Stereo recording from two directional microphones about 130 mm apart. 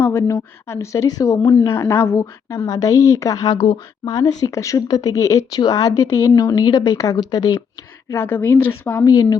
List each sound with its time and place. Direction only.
0.0 s speech: 20° left (ahead or behind)
8.1 s a woman's voice: 15° left (ahead or behind)